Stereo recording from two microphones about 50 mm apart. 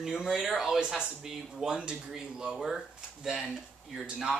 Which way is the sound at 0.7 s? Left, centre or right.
Centre.